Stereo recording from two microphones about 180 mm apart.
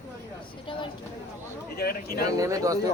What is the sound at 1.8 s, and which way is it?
Speech, 55° left (ahead or behind).